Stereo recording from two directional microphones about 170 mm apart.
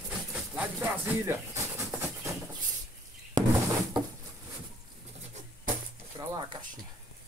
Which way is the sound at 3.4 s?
25° right (ahead or behind).